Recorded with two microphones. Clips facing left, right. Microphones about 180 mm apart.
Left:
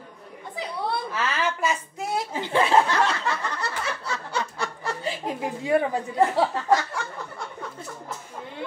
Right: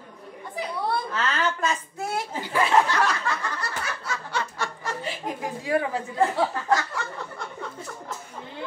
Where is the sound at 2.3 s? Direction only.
25° left (ahead or behind).